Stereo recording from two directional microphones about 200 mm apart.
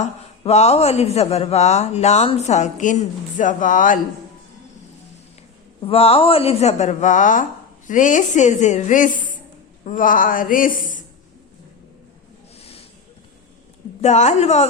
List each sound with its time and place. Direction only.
0.0 s speech: 30° left (ahead or behind)
5.8 s speech: 30° left (ahead or behind)
12.5 s a sound: 30° left (ahead or behind)
14.0 s speech: 35° left (ahead or behind)